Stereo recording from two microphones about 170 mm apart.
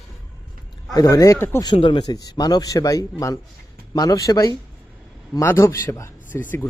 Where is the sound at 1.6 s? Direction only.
30° left (ahead or behind); by 6.5 s 15° left (ahead or behind).